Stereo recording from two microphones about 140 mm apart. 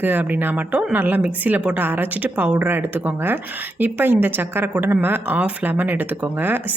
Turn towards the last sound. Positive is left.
turn(degrees=-15)  # may be behind; listen again after turning